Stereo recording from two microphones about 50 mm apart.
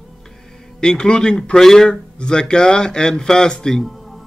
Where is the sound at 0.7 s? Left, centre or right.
Centre.